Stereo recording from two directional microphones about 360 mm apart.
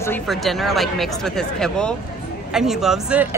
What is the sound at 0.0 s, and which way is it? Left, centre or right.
Speech, centre.